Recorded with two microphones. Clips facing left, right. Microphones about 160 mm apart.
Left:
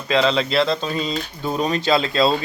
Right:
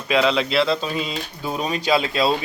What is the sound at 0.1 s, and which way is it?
Speech, 5° right (ahead or behind).